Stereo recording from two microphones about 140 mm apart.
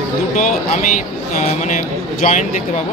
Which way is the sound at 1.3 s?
55° left (ahead or behind).